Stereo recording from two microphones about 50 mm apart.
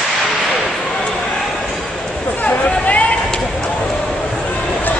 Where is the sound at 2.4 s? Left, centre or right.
Left.